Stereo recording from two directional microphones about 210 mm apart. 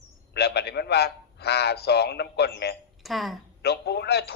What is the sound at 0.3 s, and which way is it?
A man's voice, 50° left (ahead or behind).